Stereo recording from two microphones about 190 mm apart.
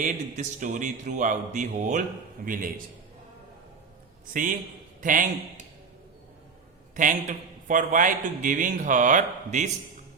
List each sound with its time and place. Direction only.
0.0 s speech: 40° right (ahead or behind)
4.9 s a man's voice: 45° right (ahead or behind)
6.9 s speech: 45° right (ahead or behind)